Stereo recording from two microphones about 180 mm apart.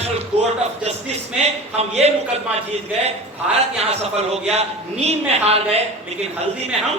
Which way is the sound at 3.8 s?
35° right (ahead or behind).